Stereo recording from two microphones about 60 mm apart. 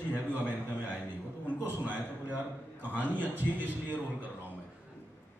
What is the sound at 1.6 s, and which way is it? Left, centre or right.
A man's voice, right.